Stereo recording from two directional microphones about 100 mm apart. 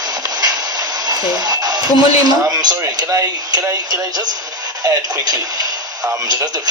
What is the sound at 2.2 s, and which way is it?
Speech, 45° right (ahead or behind).